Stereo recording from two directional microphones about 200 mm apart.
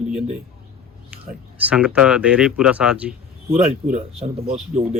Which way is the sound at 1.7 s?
5° right (ahead or behind).